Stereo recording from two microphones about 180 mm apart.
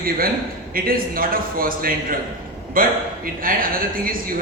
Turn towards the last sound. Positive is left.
turn(degrees=-50)  # may be behind; listen again after turning